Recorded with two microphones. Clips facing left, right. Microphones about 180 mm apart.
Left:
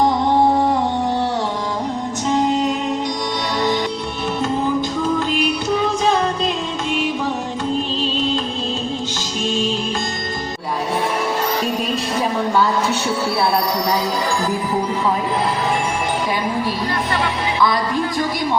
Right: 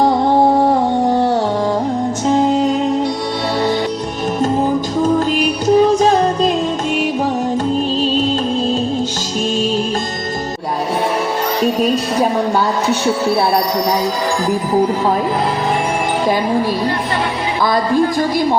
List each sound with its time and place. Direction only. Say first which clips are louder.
0.6 s music: right 4 dB; 45° right (ahead or behind)
5.3 s music: right 6 dB; 40° right (ahead or behind)